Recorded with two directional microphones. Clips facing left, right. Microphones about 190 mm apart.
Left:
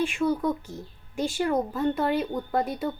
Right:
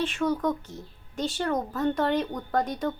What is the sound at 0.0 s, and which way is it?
Speech, 10° left (ahead or behind).